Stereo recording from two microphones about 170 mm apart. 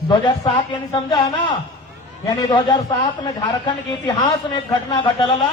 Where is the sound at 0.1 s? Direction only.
25° left (ahead or behind).